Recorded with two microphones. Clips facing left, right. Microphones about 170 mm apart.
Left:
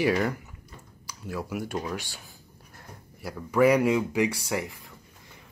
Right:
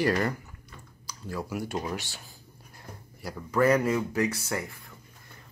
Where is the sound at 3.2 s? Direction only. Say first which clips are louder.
Left 3 dB; 5° left (ahead or behind).